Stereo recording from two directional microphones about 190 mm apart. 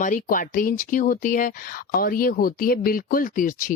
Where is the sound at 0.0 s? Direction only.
45° left (ahead or behind).